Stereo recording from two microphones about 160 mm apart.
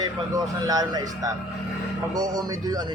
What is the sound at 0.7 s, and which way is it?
Speech, 25° right (ahead or behind).